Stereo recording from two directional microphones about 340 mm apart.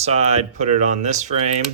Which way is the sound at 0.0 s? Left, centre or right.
Centre.